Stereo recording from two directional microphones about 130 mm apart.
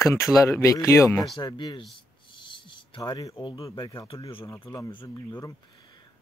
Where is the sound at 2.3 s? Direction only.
40° left (ahead or behind).